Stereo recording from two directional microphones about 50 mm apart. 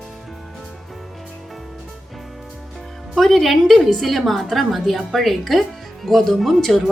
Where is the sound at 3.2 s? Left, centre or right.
Centre.